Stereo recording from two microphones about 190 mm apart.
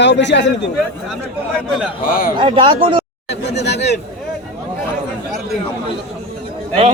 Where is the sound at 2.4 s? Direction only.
25° right (ahead or behind).